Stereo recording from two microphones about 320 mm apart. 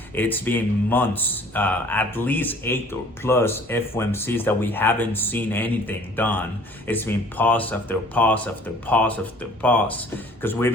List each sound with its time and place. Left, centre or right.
0.2 s speech: centre